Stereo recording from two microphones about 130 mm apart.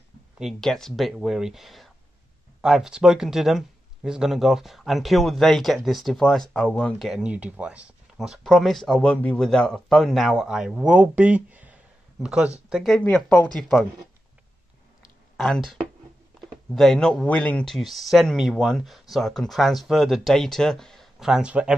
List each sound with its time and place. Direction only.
0.4 s speech: centre (ahead or behind)
13.0 s speech: 10° left (ahead or behind)
15.3 s speech: centre (ahead or behind)